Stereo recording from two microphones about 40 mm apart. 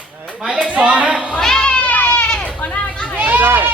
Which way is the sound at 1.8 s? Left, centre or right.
Left.